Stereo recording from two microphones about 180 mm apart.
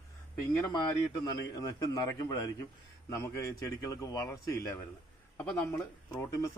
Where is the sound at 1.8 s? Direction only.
20° left (ahead or behind).